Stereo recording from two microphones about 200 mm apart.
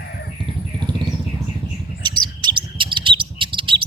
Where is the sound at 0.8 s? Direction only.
25° right (ahead or behind).